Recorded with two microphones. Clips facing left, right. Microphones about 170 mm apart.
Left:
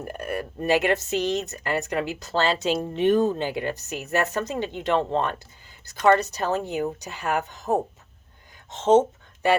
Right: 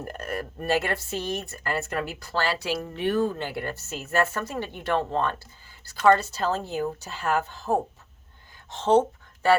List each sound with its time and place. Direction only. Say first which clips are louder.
0.0 s a woman's voice: left 2 dB; 10° left (ahead or behind)